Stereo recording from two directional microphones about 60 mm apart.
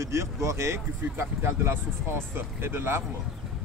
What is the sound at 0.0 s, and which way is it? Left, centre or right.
Speech, right.